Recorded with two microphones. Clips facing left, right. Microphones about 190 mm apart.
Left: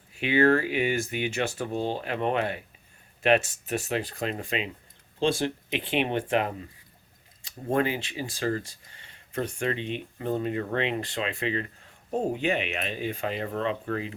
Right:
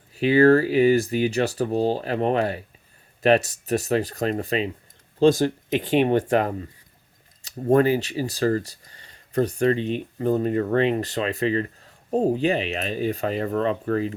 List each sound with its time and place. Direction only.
0.1 s speech: 35° right (ahead or behind)